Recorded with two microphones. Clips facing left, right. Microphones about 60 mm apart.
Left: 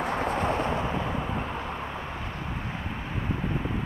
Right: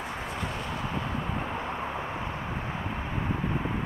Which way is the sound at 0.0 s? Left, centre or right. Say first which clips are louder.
Left 7 dB; left.